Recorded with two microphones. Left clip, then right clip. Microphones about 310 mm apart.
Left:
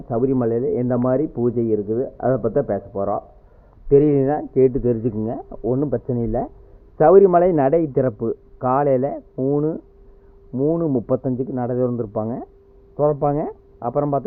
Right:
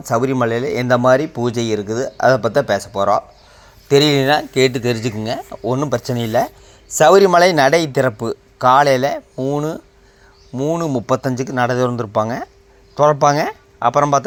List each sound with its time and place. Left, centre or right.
0.1 s speech: centre